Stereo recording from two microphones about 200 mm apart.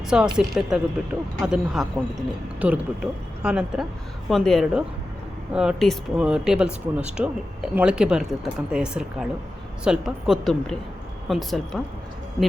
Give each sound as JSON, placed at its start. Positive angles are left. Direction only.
{"t": 0.1, "sound": "speech", "side_deg": -5}